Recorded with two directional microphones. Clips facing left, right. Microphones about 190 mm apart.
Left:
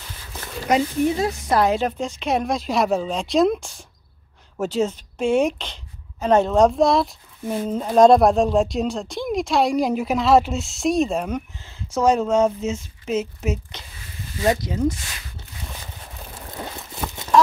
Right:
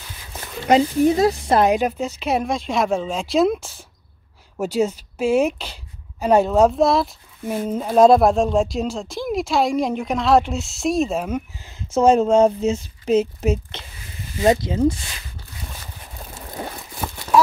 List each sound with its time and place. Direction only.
0.7 s speech: 25° right (ahead or behind)
1.7 s speech: 10° right (ahead or behind)
11.9 s speech: 25° right (ahead or behind)